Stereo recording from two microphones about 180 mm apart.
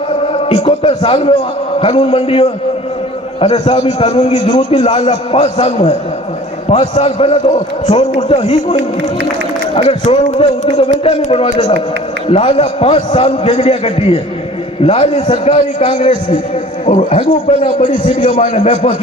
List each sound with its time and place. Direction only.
0.5 s a man's voice: 35° left (ahead or behind)
10.2 s a man's voice: 35° left (ahead or behind)
12.3 s a man's voice: 30° left (ahead or behind)
17.6 s a man's voice: 25° left (ahead or behind)
18.3 s a man's voice: 40° left (ahead or behind)